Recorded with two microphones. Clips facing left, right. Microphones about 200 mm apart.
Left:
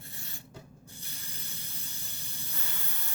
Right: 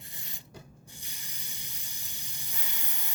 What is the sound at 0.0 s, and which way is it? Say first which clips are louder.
Rub: left 2 dB; 15° right (ahead or behind).